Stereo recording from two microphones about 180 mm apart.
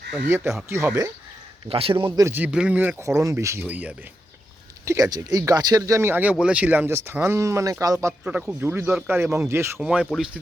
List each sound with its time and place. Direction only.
0.3 s speech: 10° right (ahead or behind)
1.6 s speech: 30° right (ahead or behind)
2.2 s speech: 10° right (ahead or behind)
4.9 s speech: 20° right (ahead or behind); by 10.4 s centre (ahead or behind)